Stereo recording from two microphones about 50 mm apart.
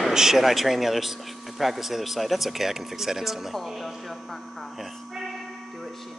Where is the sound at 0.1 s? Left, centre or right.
Centre.